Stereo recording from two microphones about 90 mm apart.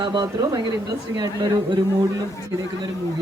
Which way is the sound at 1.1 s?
45° right (ahead or behind).